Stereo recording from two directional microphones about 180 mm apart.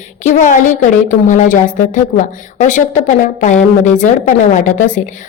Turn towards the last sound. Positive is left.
turn(degrees=45)  # may be behind; listen again after turning